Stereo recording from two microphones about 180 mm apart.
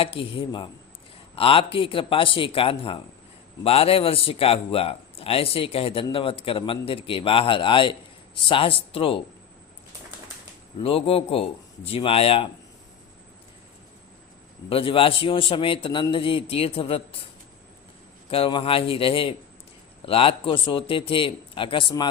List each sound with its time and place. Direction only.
0.0 s a man's voice: 30° left (ahead or behind)
10.8 s a man's voice: 30° left (ahead or behind)
14.7 s a man's voice: 30° left (ahead or behind)
18.3 s a man's voice: 30° left (ahead or behind)